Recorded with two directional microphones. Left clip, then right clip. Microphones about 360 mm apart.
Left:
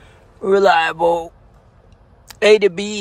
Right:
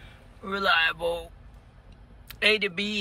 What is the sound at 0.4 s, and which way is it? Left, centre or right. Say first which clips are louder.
Speech: left 11 dB; left.